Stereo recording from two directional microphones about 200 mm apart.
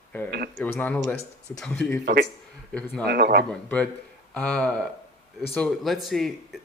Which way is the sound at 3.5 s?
5° left (ahead or behind).